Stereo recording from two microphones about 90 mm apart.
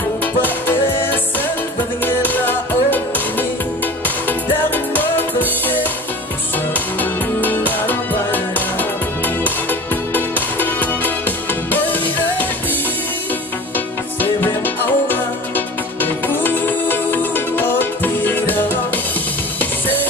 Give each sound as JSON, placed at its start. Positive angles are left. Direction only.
{"t": 0.2, "sound": "music", "side_deg": 20}
{"t": 13.7, "sound": "music", "side_deg": 20}